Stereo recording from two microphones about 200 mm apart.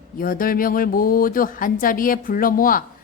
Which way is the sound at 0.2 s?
45° left (ahead or behind).